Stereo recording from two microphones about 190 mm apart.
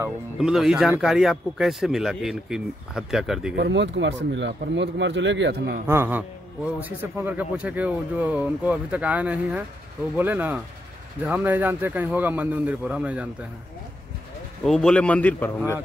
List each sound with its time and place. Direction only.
0.4 s speech: centre (ahead or behind)
3.5 s speech: 65° right (ahead or behind)
5.9 s a man's voice: 10° right (ahead or behind)
14.6 s speech: 5° left (ahead or behind)